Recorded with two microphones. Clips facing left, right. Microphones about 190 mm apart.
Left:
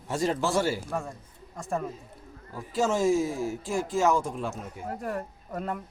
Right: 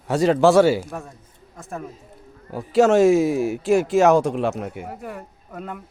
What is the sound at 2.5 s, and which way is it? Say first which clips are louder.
Speech: right 11 dB; 70° right (ahead or behind).